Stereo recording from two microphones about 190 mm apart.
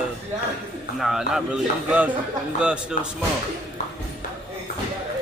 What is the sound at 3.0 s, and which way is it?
Speech, 40° left (ahead or behind).